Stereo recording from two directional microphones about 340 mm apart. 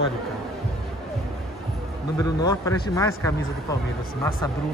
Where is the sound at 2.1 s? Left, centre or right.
Centre.